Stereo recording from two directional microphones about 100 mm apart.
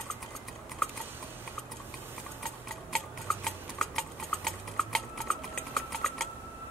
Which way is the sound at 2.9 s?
5° left (ahead or behind).